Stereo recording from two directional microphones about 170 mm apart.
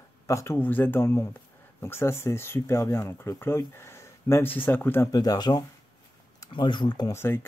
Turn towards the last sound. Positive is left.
turn(degrees=15)  # may be behind; listen again after turning